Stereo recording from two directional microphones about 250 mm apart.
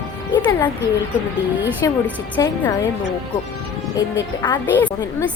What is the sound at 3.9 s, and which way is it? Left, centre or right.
Speech, centre.